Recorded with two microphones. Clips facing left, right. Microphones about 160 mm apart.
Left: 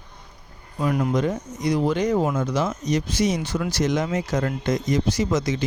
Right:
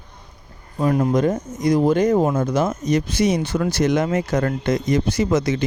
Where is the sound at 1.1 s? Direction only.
45° right (ahead or behind).